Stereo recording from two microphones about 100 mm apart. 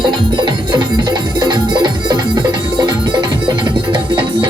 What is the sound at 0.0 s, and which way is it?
Music, 45° right (ahead or behind).